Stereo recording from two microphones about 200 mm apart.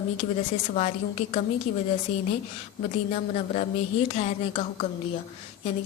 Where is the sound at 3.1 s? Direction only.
35° left (ahead or behind).